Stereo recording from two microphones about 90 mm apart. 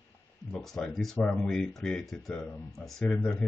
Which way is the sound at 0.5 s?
5° left (ahead or behind).